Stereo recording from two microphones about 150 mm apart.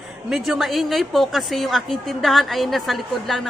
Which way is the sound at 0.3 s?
Centre (ahead or behind).